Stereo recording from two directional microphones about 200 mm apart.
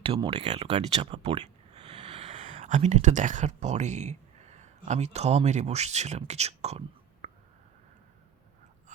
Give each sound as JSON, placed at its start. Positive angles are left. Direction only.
{"t": 0.0, "sound": "speech", "side_deg": -25}